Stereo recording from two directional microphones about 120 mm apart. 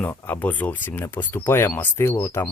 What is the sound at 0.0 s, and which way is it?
Speech, 15° left (ahead or behind).